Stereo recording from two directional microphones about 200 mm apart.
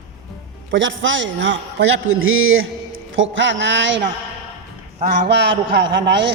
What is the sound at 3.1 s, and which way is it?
A man's voice, 70° right (ahead or behind).